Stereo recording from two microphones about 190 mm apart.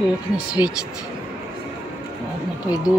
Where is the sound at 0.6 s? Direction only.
25° left (ahead or behind).